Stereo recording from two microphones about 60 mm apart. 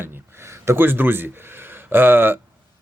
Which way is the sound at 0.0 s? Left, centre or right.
Right.